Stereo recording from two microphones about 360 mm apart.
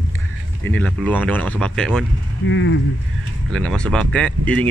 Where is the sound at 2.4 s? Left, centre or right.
Left.